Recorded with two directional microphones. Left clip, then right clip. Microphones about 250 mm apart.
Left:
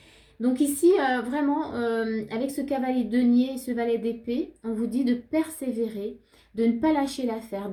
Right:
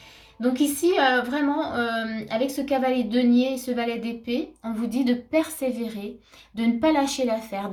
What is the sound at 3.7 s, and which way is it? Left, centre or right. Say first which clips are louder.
A woman's voice: left 1 dB; right.